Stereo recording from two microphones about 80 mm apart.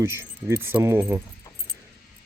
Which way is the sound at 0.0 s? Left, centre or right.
Right.